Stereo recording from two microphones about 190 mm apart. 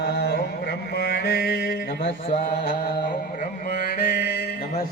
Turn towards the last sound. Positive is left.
turn(degrees=55)  # may be behind; listen again after turning